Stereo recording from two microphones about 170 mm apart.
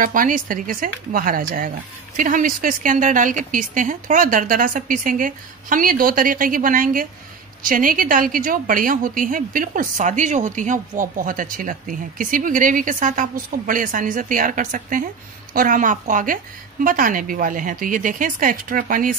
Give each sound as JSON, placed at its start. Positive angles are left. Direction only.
{"t": 0.0, "sound": "a woman's voice", "side_deg": -55}